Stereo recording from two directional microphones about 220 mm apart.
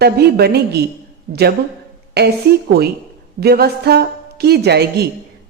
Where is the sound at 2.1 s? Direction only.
45° right (ahead or behind).